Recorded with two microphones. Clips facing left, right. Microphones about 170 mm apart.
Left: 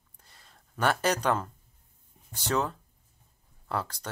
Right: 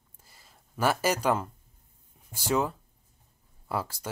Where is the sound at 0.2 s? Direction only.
5° right (ahead or behind).